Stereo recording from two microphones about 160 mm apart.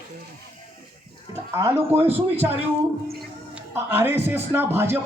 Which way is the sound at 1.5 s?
15° right (ahead or behind).